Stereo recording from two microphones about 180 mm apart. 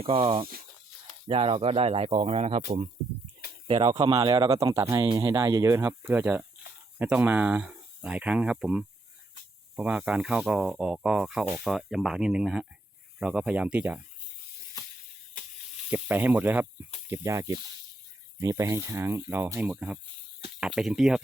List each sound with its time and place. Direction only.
0.0 s speech: 30° right (ahead or behind); by 14.0 s 10° right (ahead or behind)
15.9 s speech: 10° right (ahead or behind)